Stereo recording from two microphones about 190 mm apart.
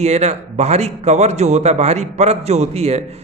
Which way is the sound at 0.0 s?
35° right (ahead or behind).